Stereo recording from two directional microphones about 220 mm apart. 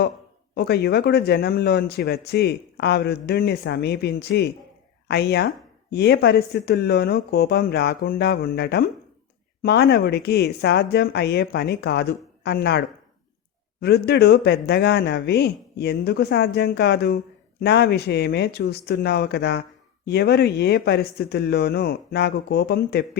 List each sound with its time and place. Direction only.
0.5 s speech: 45° left (ahead or behind)
13.8 s speech: 45° left (ahead or behind)